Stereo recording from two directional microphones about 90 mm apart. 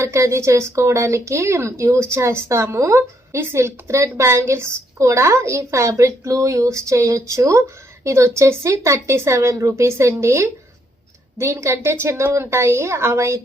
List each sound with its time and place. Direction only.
0.0 s speech: 30° right (ahead or behind)